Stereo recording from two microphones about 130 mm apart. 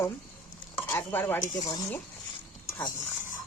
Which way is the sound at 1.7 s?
30° left (ahead or behind).